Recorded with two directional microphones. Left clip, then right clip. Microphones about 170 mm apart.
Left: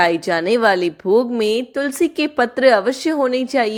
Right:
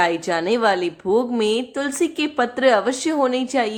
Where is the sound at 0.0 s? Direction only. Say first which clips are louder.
Left 3 dB; 30° left (ahead or behind).